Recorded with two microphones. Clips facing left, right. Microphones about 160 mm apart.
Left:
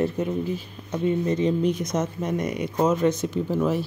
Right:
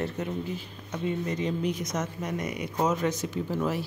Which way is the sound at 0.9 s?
25° left (ahead or behind).